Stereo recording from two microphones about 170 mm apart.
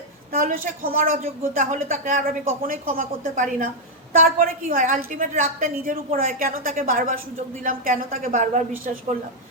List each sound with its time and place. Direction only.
0.3 s a woman's voice: 55° right (ahead or behind)